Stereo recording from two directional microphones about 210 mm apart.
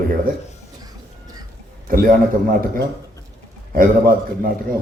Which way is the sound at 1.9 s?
40° right (ahead or behind).